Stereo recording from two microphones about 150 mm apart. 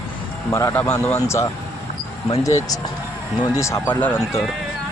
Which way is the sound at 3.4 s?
20° left (ahead or behind).